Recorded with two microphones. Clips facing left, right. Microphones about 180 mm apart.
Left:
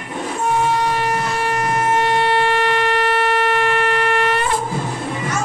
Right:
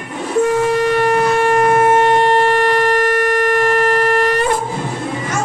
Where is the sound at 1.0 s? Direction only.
55° right (ahead or behind); by 4.5 s 40° right (ahead or behind).